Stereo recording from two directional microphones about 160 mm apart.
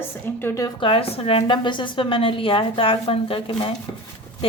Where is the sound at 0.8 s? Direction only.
35° left (ahead or behind).